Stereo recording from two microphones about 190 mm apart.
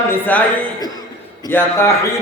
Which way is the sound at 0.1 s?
10° left (ahead or behind).